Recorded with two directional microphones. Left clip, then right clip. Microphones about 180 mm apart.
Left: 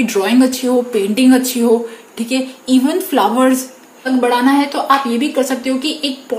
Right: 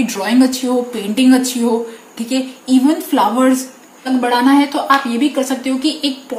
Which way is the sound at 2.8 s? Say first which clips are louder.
Right 1 dB; 35° left (ahead or behind).